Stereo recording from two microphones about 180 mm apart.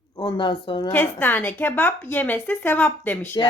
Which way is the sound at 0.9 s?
10° left (ahead or behind).